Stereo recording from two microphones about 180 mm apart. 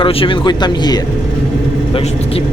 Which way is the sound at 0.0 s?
30° left (ahead or behind).